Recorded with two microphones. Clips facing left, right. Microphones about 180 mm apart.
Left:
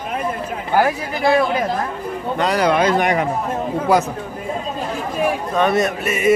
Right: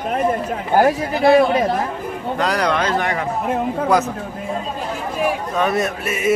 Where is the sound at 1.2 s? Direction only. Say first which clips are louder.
Right 3 dB; 25° right (ahead or behind).